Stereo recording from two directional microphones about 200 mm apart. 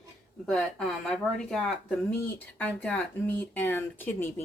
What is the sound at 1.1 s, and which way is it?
Speech, 5° left (ahead or behind).